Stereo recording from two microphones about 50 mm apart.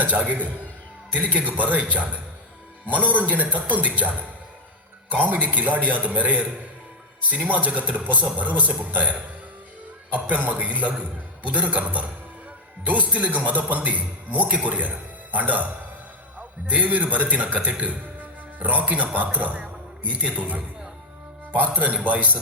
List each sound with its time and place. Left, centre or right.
0.0 s a man's voice: right